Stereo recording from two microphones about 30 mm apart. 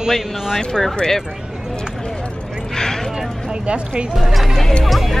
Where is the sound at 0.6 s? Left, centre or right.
Centre.